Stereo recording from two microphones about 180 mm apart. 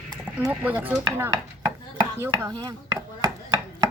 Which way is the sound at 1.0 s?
20° right (ahead or behind).